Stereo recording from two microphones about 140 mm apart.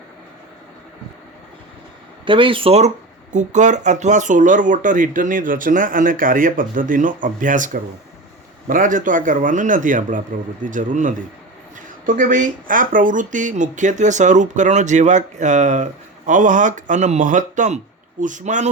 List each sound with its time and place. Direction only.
2.2 s speech: 35° right (ahead or behind)
3.3 s speech: 60° right (ahead or behind)